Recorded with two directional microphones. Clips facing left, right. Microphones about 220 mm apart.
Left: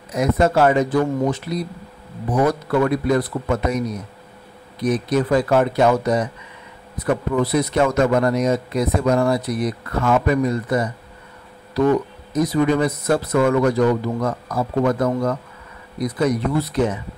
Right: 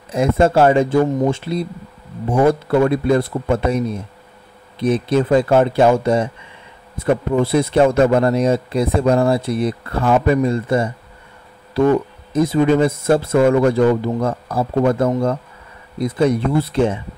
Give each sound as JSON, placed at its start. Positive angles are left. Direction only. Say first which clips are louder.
{"t": 0.1, "sound": "a man's voice", "louder": "right 3 dB", "side_deg": -30}